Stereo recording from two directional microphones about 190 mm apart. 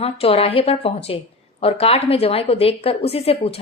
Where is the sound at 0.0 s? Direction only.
30° left (ahead or behind).